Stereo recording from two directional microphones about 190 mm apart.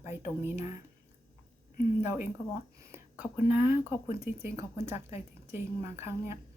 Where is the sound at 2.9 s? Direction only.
5° right (ahead or behind).